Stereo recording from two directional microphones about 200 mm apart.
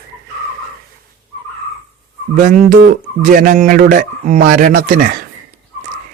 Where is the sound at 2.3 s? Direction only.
40° right (ahead or behind).